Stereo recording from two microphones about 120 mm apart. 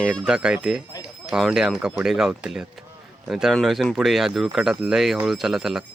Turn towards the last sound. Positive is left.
turn(degrees=-5)  # may be behind; listen again after turning